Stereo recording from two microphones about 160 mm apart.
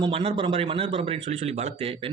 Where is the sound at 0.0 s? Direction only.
35° right (ahead or behind).